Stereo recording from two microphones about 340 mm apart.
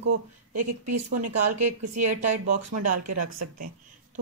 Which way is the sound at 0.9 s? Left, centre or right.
Right.